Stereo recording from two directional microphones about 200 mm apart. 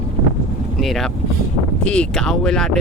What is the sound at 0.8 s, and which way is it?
Speech, centre (ahead or behind).